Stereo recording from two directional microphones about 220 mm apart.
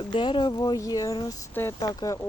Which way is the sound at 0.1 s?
20° left (ahead or behind).